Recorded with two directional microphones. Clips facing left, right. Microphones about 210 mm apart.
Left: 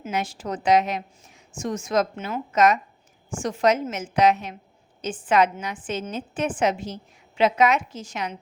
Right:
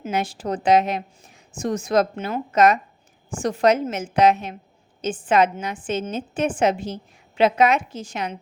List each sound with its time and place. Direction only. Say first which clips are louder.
0.0 s a woman's voice: right 3 dB; 30° right (ahead or behind)
5.3 s a woman's voice: right 1 dB; 25° right (ahead or behind)